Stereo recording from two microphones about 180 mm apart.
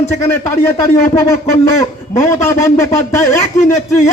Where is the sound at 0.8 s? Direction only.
15° left (ahead or behind).